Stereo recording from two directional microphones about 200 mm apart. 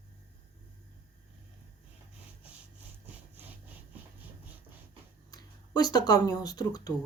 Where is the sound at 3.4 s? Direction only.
10° right (ahead or behind).